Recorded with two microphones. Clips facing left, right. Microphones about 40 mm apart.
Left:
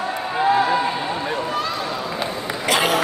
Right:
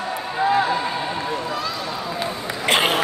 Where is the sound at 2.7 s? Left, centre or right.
Right.